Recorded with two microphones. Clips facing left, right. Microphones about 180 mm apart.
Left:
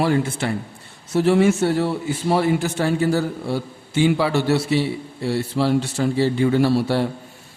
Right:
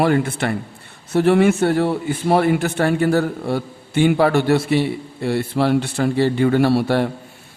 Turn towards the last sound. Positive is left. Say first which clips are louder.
# right 2 dB
turn(degrees=-60)  # may be behind; listen again after turning